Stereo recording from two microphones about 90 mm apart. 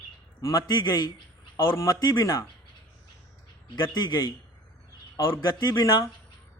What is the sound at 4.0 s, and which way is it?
Speech, 50° left (ahead or behind).